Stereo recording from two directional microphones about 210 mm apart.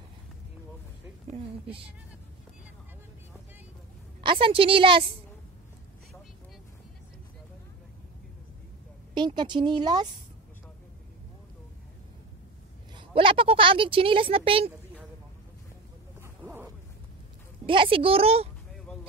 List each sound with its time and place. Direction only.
4.2 s a woman's voice: 25° right (ahead or behind)
9.1 s a woman's voice: 20° right (ahead or behind)
12.9 s a woman's voice: 25° right (ahead or behind)
16.2 s a sound: 10° right (ahead or behind)
17.6 s a woman's voice: 25° right (ahead or behind)